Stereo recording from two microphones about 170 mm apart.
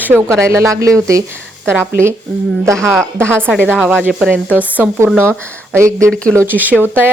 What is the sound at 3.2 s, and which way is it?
Speech, 5° left (ahead or behind).